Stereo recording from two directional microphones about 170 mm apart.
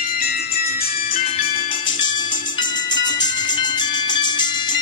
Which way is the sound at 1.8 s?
25° left (ahead or behind).